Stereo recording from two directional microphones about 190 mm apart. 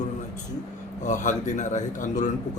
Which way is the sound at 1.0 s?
40° left (ahead or behind).